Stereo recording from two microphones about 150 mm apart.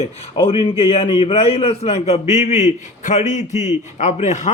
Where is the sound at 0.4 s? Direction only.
40° left (ahead or behind).